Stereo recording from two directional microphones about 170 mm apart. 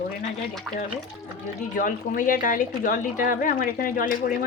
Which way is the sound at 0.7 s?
5° right (ahead or behind).